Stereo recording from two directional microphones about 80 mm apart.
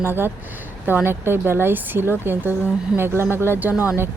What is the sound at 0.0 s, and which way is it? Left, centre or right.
Speech, right.